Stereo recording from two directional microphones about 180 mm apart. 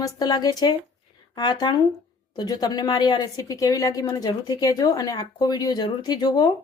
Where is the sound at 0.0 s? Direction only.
20° left (ahead or behind).